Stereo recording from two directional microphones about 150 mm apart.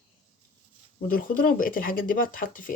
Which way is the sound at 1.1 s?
70° left (ahead or behind).